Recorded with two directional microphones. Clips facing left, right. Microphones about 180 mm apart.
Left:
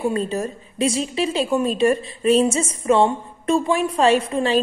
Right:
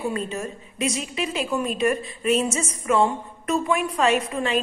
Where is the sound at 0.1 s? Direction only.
35° left (ahead or behind).